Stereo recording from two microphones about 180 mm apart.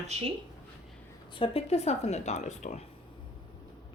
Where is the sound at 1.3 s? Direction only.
30° left (ahead or behind).